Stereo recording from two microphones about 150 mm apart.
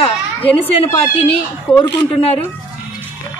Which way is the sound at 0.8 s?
40° left (ahead or behind).